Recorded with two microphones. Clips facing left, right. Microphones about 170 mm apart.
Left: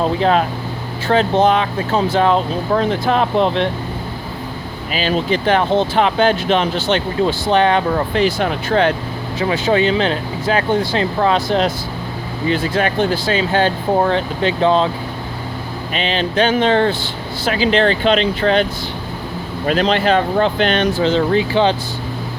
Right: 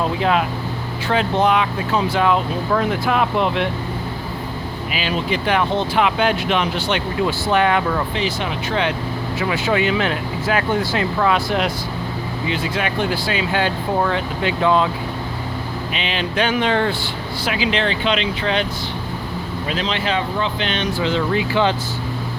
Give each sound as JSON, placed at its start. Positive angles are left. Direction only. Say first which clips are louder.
{"t": 0.0, "sound": "speech", "louder": "left 3 dB", "side_deg": 35}
{"t": 4.9, "sound": "speech", "louder": "left 5 dB", "side_deg": 35}
{"t": 7.9, "sound": "speech", "louder": "left 6 dB", "side_deg": 45}
{"t": 15.9, "sound": "speech", "louder": "left 6 dB", "side_deg": 35}
{"t": 21.5, "sound": "speech", "louder": "left 1 dB", "side_deg": 20}